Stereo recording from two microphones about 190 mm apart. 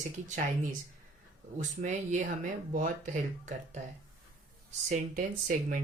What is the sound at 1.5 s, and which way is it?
Speech, 40° right (ahead or behind).